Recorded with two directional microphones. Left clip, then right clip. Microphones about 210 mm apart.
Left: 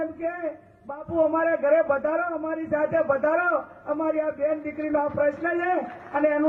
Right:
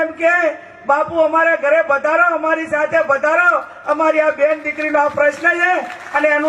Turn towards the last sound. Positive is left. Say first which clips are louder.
# right 8 dB
turn(degrees=-10)  # may be behind; listen again after turning